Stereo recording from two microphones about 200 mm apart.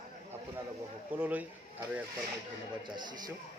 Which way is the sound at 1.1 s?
10° right (ahead or behind).